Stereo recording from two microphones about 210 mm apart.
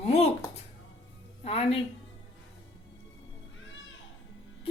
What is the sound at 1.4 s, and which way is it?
Speech, 30° left (ahead or behind).